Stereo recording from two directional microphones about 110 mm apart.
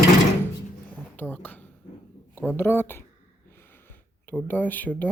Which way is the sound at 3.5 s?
20° left (ahead or behind).